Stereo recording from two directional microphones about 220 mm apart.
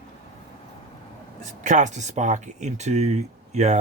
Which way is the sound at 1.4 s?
35° right (ahead or behind).